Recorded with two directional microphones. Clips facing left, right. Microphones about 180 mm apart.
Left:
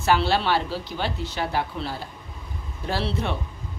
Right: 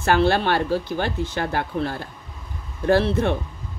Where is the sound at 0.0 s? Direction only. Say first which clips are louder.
Right 3 dB; 50° right (ahead or behind).